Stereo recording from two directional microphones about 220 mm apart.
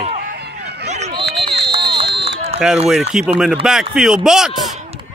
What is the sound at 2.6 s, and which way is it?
A man's voice, 5° right (ahead or behind).